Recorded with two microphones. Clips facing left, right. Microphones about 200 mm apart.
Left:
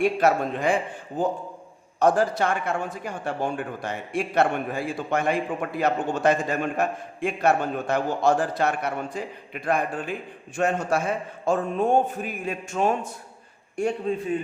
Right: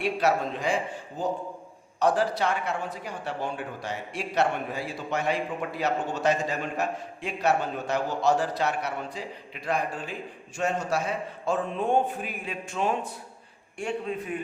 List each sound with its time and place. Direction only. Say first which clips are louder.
0.0 s a man's voice: left 4 dB; 50° left (ahead or behind)